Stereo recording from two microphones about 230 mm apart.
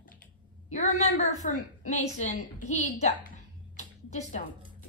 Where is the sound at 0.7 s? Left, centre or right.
Left.